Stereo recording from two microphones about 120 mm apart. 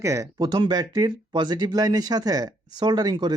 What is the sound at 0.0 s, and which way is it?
Speech, 25° right (ahead or behind).